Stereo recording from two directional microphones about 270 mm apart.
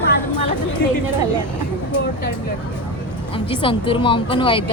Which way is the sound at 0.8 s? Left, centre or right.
Left.